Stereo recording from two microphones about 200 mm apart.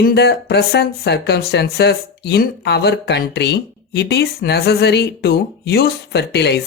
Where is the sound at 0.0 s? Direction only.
55° left (ahead or behind).